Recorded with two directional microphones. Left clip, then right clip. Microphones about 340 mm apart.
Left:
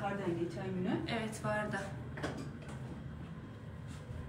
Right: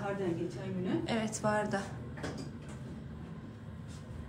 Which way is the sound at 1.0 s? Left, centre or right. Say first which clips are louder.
Right 4 dB; centre.